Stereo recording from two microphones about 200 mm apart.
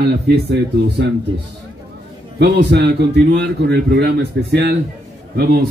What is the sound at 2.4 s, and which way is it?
A man's voice, 60° right (ahead or behind).